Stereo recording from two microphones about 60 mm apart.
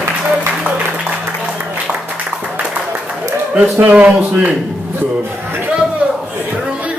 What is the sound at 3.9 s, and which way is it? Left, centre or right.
Speech, right.